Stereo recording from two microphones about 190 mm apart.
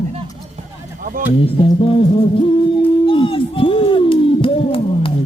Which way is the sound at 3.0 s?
25° left (ahead or behind).